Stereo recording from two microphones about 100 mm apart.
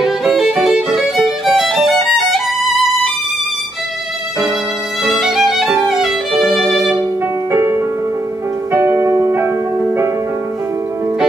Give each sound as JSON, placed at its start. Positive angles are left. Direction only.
{"t": 0.0, "sound": "music", "side_deg": -5}
{"t": 5.0, "sound": "violin", "side_deg": 0}
{"t": 7.5, "sound": "music", "side_deg": -30}